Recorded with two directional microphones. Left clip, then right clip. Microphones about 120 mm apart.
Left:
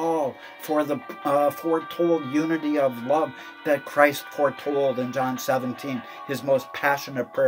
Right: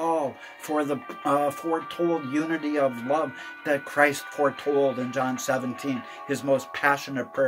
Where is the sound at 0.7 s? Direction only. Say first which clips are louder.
Left 2 dB; 30° left (ahead or behind).